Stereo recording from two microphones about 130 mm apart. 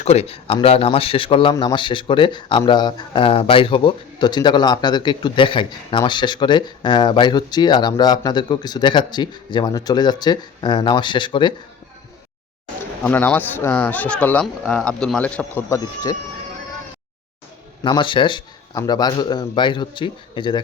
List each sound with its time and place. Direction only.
0.0 s speech: 55° left (ahead or behind)
13.0 s speech: 15° left (ahead or behind)
15.7 s speech: 30° left (ahead or behind)
17.8 s speech: 40° left (ahead or behind)